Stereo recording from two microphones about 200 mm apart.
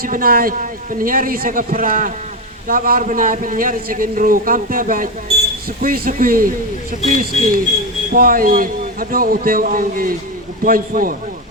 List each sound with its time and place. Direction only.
0.0 s a man's voice: 45° right (ahead or behind)